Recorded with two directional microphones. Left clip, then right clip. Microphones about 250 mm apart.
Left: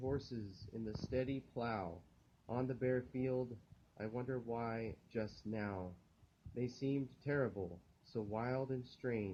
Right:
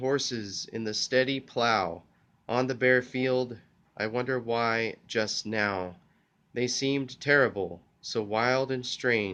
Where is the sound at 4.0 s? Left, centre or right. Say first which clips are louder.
Right 14 dB; right.